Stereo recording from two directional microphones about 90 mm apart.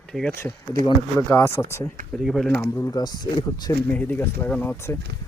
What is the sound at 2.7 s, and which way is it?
Speech, 40° left (ahead or behind).